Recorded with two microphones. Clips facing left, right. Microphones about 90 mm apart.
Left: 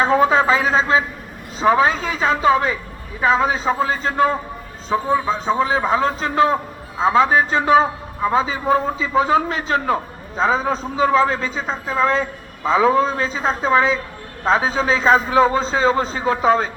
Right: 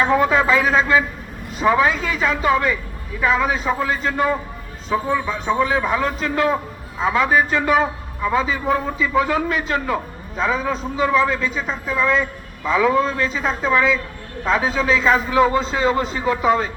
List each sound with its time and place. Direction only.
0.0 s a man's voice: 25° left (ahead or behind)